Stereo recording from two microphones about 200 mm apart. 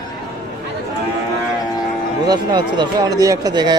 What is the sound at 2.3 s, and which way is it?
Speech, 20° right (ahead or behind).